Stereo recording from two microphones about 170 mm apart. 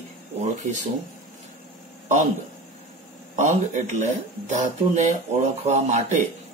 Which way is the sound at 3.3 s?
45° right (ahead or behind).